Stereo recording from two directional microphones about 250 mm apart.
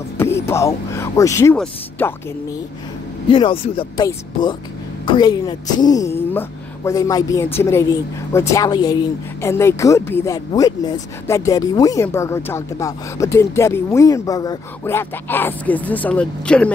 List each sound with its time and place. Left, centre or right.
0.2 s speech: centre
3.3 s a woman's voice: left; by 16.7 s centre